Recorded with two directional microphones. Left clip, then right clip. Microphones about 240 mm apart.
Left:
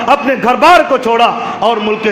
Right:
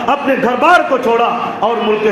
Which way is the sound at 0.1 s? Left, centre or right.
Left.